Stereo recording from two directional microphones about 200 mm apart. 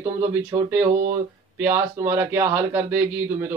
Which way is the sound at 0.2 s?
10° right (ahead or behind).